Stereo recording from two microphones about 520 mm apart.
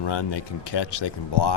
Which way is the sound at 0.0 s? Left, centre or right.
Left.